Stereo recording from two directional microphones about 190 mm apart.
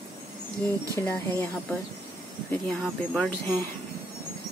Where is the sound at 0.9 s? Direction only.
15° left (ahead or behind).